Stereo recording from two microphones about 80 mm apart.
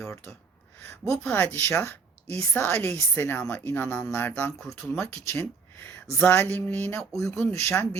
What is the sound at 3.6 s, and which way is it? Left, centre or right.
Speech, left.